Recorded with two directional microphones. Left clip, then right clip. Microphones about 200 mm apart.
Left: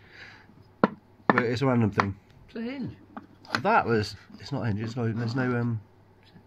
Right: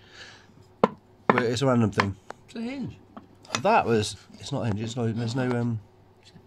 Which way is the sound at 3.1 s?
5° right (ahead or behind).